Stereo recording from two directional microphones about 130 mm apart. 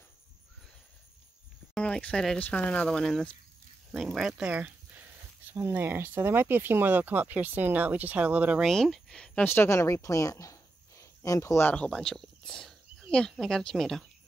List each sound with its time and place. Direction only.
1.7 s speech: 10° left (ahead or behind); by 8.6 s 10° right (ahead or behind)
8.6 s speech: centre (ahead or behind); by 11.7 s 20° left (ahead or behind)
11.7 s speech: 5° left (ahead or behind)